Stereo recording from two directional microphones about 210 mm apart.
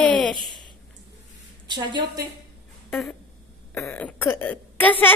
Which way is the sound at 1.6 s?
20° right (ahead or behind).